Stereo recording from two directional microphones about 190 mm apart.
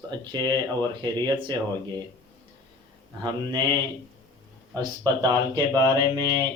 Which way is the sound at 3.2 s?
20° right (ahead or behind).